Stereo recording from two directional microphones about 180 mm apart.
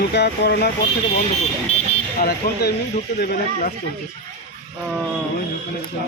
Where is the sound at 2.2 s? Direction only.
60° left (ahead or behind).